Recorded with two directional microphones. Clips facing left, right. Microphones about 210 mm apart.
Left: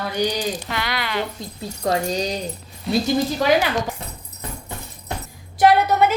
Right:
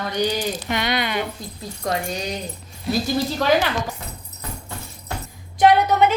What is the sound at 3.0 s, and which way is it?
Speech, 15° left (ahead or behind).